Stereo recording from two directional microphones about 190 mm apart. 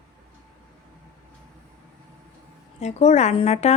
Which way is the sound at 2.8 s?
35° left (ahead or behind).